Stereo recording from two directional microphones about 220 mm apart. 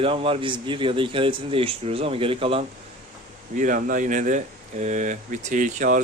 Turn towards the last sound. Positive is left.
turn(degrees=-35)  # may be behind; listen again after turning